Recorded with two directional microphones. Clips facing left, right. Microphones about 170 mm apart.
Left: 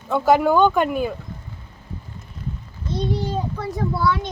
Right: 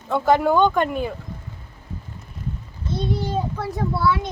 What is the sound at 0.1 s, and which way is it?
Speech, 5° left (ahead or behind).